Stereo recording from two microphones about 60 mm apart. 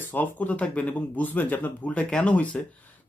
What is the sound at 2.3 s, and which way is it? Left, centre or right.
Speech, left.